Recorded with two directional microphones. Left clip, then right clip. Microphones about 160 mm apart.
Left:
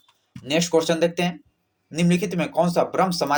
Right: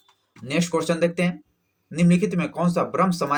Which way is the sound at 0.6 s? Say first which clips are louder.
Left 2 dB; 30° left (ahead or behind).